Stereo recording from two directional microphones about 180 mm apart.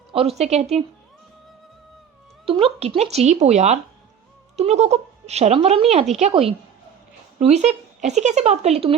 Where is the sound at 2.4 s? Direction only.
30° right (ahead or behind).